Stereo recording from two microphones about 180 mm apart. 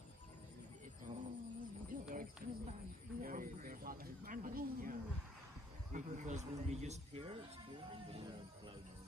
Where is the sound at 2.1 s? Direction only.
50° right (ahead or behind).